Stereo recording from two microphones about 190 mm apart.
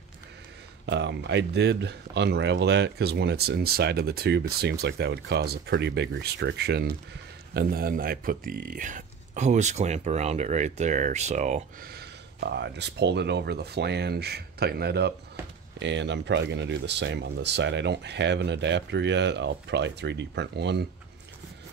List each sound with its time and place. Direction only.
0.8 s speech: 65° right (ahead or behind); by 11.9 s 40° right (ahead or behind)
11.9 s speech: 60° right (ahead or behind)